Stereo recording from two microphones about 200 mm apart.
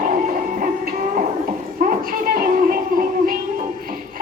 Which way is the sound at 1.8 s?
45° right (ahead or behind).